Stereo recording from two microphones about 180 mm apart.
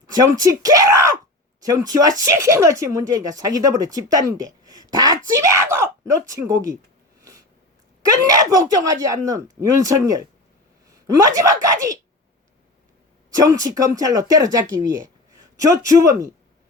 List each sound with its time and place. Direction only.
0.1 s speech: 20° right (ahead or behind)
7.2 s snort: 20° right (ahead or behind)
8.0 s a woman's voice: 20° right (ahead or behind)
13.3 s speech: 20° right (ahead or behind)